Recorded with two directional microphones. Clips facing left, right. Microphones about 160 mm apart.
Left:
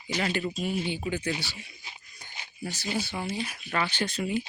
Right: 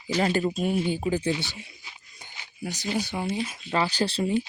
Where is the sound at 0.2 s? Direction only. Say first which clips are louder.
Right 6 dB; 35° right (ahead or behind).